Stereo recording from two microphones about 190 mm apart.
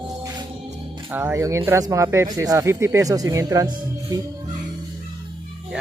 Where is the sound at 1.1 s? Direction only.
10° right (ahead or behind).